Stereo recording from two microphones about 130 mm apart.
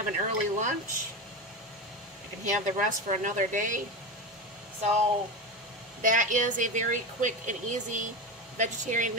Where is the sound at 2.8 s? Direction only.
75° right (ahead or behind).